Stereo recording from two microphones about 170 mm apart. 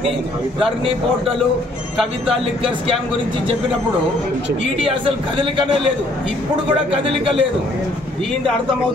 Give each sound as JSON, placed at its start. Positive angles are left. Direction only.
{"t": 4.8, "sound": "a man's voice", "side_deg": -30}
{"t": 7.0, "sound": "a man's voice", "side_deg": -35}